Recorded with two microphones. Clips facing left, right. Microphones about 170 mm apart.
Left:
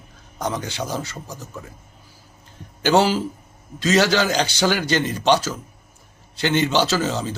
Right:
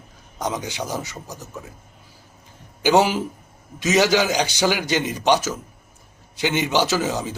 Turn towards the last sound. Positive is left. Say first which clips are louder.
# even
turn(degrees=-15)  # may be behind; listen again after turning